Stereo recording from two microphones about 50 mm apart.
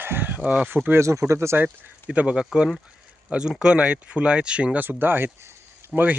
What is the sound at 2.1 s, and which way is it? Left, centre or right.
Speech, centre.